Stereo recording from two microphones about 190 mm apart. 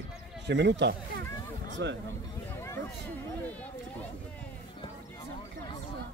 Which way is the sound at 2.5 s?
15° left (ahead or behind).